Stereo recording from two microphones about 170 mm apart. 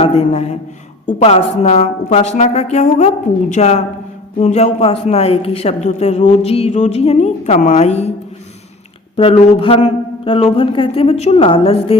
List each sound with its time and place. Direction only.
0.0 s a woman's voice: 35° left (ahead or behind)
9.1 s a woman's voice: 35° left (ahead or behind)